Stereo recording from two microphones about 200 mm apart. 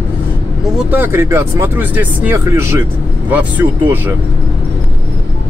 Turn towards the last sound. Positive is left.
turn(degrees=-10)  # may be behind; listen again after turning